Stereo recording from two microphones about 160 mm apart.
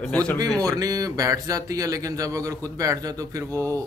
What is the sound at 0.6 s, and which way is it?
Speech, 20° right (ahead or behind).